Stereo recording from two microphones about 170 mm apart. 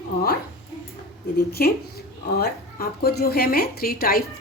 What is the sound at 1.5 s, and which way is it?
A woman's voice, 65° left (ahead or behind).